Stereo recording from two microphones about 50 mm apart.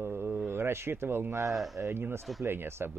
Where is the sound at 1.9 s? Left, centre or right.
Right.